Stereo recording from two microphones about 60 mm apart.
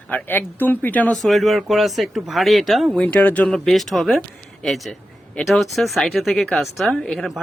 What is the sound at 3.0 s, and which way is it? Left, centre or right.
Speech, left.